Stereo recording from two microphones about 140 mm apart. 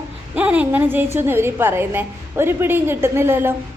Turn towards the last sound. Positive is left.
turn(degrees=-15)  # may be behind; listen again after turning